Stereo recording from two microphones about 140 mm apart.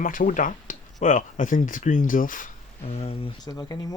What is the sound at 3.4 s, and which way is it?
Speech, 25° left (ahead or behind).